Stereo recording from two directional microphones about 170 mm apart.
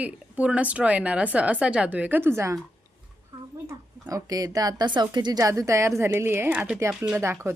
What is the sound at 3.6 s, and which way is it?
Speech, 20° right (ahead or behind).